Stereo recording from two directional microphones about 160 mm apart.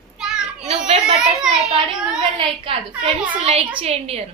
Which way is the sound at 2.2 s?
35° right (ahead or behind).